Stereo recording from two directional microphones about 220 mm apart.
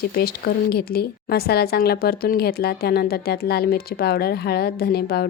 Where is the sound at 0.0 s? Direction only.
45° left (ahead or behind).